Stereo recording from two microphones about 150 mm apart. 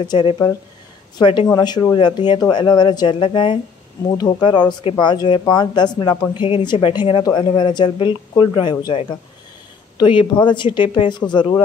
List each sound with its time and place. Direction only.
0.1 s speech: 35° left (ahead or behind)